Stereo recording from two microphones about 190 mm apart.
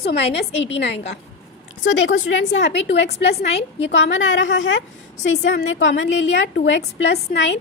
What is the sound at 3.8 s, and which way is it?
A woman's voice, 70° left (ahead or behind).